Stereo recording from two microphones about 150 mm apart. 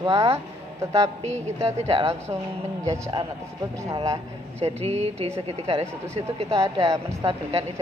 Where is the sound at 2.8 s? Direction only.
20° right (ahead or behind).